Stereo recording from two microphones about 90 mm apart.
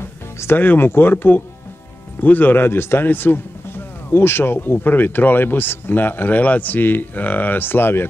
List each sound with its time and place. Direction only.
0.4 s speech: 25° left (ahead or behind)